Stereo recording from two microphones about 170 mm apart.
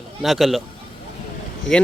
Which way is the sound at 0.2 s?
Centre (ahead or behind).